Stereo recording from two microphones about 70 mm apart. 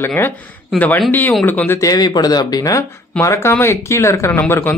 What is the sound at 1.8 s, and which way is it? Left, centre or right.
Speech, left.